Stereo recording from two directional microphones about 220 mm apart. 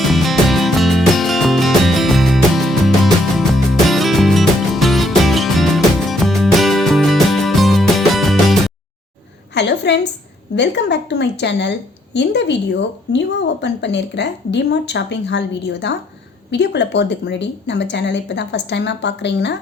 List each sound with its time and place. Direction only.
0.0 s music: centre (ahead or behind)
9.6 s a sound: 50° left (ahead or behind)
10.5 s a woman's voice: 50° left (ahead or behind)